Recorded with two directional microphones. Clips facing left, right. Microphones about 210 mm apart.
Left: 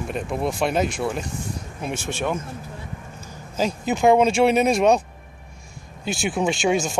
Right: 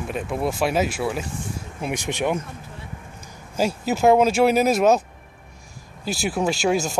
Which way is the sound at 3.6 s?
5° right (ahead or behind).